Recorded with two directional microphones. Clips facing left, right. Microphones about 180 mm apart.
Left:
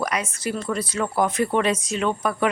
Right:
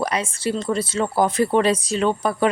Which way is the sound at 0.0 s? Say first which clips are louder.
Right 3 dB; 30° right (ahead or behind).